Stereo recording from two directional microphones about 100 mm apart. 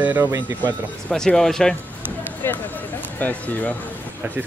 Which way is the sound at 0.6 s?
10° left (ahead or behind).